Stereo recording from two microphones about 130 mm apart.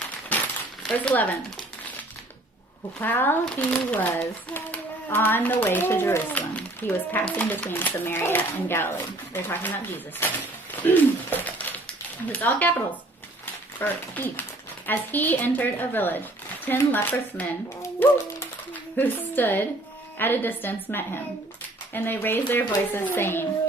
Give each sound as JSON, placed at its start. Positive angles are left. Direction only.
{"t": 0.3, "sound": "crumpling", "side_deg": 10}
{"t": 0.9, "sound": "a child's voice", "side_deg": 10}
{"t": 3.0, "sound": "a child's voice", "side_deg": 15}
{"t": 10.8, "sound": "a sound", "side_deg": 15}
{"t": 14.8, "sound": "a child's voice", "side_deg": 15}